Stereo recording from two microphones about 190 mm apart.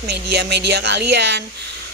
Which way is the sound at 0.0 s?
60° right (ahead or behind).